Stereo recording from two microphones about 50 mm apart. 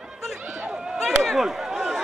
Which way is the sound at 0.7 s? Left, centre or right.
Centre.